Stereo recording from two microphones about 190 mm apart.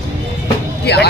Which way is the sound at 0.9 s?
60° left (ahead or behind).